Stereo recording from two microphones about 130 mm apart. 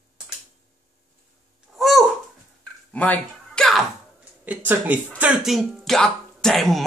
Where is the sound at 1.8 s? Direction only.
Centre (ahead or behind).